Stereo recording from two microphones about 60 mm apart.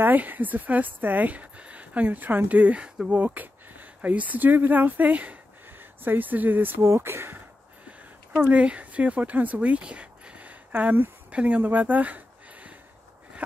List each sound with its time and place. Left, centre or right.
0.0 s speech: right
6.8 s speech: right
8.3 s speech: right